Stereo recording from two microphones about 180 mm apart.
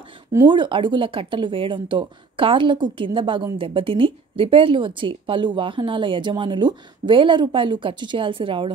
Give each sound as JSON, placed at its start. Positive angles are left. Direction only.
{"t": 0.3, "sound": "speech", "side_deg": -20}